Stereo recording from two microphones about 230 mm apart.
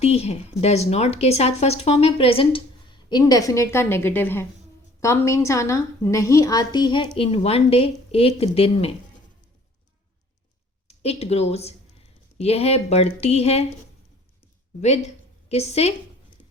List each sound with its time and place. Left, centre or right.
0.0 s a woman's voice: left
10.8 s speech: left
14.8 s a woman's voice: left